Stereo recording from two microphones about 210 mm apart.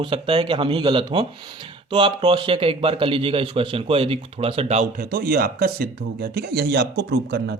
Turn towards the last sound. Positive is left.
turn(degrees=-50)  # may be behind; listen again after turning